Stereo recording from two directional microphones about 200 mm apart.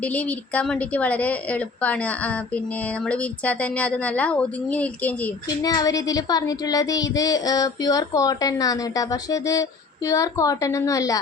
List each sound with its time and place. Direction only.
0.0 s speech: 5° left (ahead or behind)
5.6 s speech: 20° left (ahead or behind)